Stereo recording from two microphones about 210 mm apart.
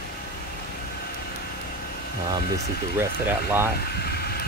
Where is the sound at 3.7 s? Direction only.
50° left (ahead or behind).